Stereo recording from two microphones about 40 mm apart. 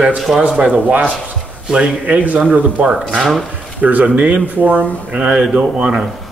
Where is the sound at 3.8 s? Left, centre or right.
Right.